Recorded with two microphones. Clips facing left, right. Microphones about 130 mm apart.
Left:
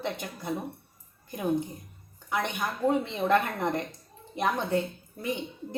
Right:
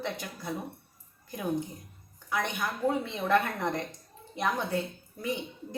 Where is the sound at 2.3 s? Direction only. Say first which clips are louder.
Left 1 dB; 20° left (ahead or behind).